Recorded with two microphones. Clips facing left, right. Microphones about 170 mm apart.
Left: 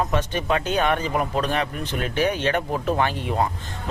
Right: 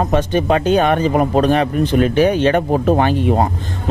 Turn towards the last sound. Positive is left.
turn(degrees=-35)  # may be behind; listen again after turning